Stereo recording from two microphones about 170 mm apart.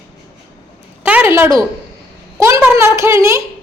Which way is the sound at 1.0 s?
10° right (ahead or behind).